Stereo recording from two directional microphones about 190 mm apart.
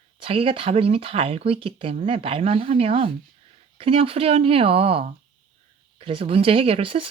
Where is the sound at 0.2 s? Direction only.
30° right (ahead or behind).